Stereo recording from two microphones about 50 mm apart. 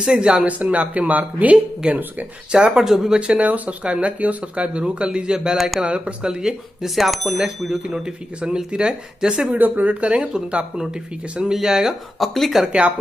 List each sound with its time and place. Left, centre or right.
0.0 s speech: centre
0.5 s speech: right; by 3.2 s centre
3.2 s speech: right
6.2 s speech: centre
8.0 s speech: centre
9.4 s speech: right; by 11.9 s centre
12.2 s speech: centre